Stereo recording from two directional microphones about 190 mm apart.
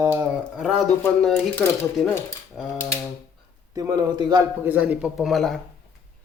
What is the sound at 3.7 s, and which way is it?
Speech, 20° right (ahead or behind).